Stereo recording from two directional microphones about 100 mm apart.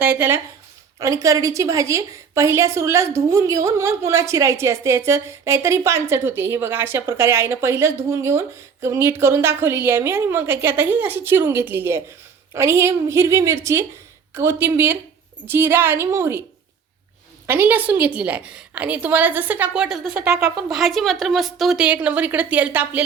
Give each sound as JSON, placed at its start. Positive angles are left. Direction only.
{"t": 0.0, "sound": "a woman's voice", "side_deg": -20}
{"t": 0.9, "sound": "a woman's voice", "side_deg": -35}
{"t": 17.4, "sound": "a woman's voice", "side_deg": -20}
{"t": 20.2, "sound": "a woman's voice", "side_deg": -30}
{"t": 20.7, "sound": "a woman's voice", "side_deg": 0}
{"t": 21.8, "sound": "a woman's voice", "side_deg": -15}